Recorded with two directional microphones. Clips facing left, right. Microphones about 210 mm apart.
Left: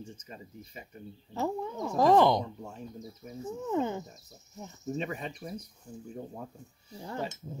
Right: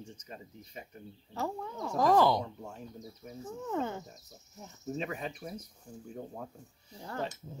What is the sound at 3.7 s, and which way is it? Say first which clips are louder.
Speech: left 4 dB; 15° left (ahead or behind).